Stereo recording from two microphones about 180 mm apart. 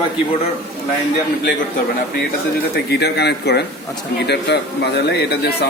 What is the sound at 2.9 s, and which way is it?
A man's voice, 65° left (ahead or behind).